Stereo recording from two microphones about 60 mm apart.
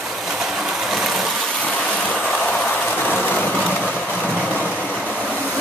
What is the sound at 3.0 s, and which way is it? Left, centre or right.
Vehicle, left.